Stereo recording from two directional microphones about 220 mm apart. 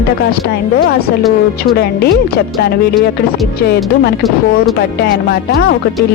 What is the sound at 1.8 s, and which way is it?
Speech, 45° left (ahead or behind).